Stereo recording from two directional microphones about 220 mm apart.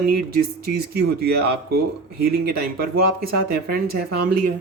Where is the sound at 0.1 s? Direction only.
45° right (ahead or behind).